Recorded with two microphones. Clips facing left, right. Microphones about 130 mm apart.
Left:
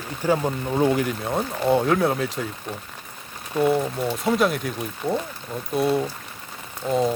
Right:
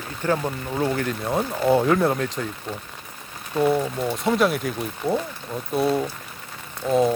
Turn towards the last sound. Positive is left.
turn(degrees=-5)  # may be behind; listen again after turning